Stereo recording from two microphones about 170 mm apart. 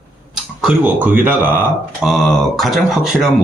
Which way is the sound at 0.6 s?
10° right (ahead or behind).